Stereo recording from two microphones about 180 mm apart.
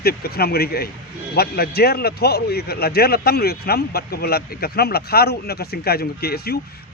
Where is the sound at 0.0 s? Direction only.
60° left (ahead or behind).